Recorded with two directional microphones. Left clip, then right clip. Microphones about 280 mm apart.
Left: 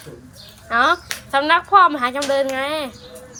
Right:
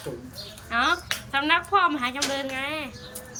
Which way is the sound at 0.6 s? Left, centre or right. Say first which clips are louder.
Left 7 dB; centre.